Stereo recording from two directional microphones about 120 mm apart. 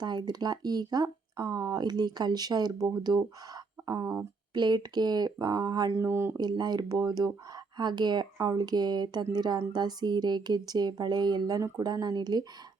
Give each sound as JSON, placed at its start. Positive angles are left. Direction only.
{"t": 0.0, "sound": "speech", "side_deg": -35}
{"t": 4.5, "sound": "speech", "side_deg": -40}
{"t": 6.0, "sound": "speech", "side_deg": -20}
{"t": 6.3, "sound": "speech", "side_deg": -35}